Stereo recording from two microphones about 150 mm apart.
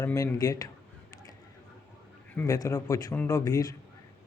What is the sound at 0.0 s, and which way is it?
Speech, 20° left (ahead or behind).